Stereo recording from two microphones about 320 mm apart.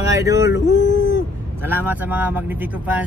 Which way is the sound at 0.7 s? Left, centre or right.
Left.